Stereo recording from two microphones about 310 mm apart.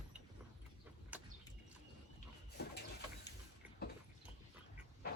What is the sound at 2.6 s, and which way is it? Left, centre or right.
Printer, left.